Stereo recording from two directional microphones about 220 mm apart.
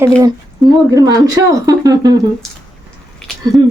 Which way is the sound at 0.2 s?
20° right (ahead or behind).